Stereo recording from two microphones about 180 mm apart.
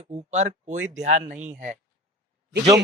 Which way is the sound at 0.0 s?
40° right (ahead or behind).